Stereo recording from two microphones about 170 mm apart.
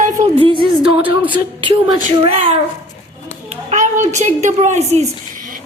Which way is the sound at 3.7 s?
45° right (ahead or behind).